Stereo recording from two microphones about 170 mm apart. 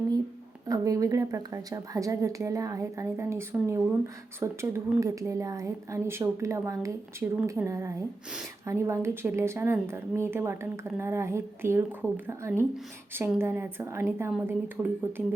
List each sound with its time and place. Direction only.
0.7 s a woman's voice: 20° right (ahead or behind)